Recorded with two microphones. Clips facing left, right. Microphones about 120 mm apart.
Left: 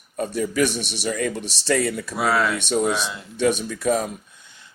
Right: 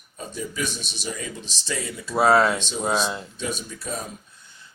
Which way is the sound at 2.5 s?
65° left (ahead or behind).